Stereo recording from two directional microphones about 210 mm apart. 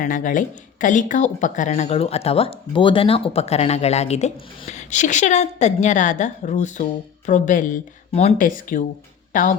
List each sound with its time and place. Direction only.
0.0 s speech: 40° left (ahead or behind)